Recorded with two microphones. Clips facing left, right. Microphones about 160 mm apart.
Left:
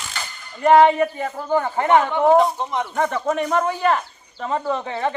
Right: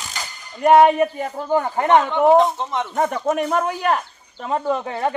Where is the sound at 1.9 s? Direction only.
5° left (ahead or behind).